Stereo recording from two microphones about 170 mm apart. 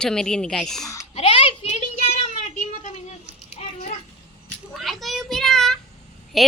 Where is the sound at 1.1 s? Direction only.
30° left (ahead or behind).